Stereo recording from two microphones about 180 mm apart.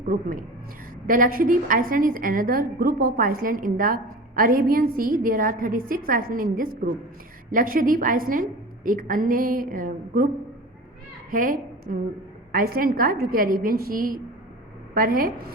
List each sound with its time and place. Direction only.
0.1 s a woman's voice: 50° right (ahead or behind)